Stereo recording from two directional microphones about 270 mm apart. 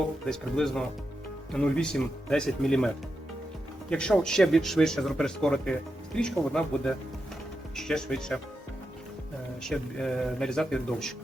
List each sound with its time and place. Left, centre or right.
0.3 s speech: centre
9.6 s speech: centre